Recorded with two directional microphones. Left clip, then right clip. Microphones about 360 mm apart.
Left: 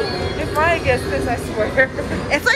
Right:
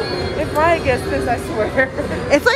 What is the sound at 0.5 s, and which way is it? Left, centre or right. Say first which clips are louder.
Speech: right 1 dB; right.